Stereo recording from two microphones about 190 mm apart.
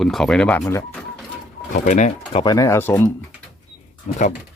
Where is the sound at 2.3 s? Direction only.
20° left (ahead or behind).